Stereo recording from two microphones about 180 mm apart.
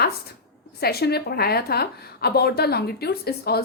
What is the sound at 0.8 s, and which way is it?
A woman's voice, 60° left (ahead or behind).